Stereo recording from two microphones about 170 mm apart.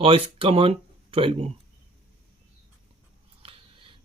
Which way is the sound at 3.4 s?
30° right (ahead or behind).